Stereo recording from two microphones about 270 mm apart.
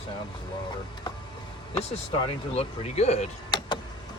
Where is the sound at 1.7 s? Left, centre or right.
Centre.